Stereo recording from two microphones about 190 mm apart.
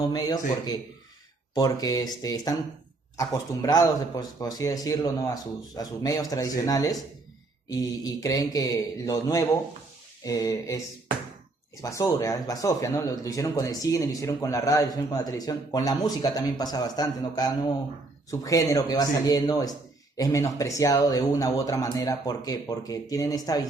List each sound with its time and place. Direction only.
0.1 s speech: 20° left (ahead or behind)
11.8 s speech: 15° left (ahead or behind)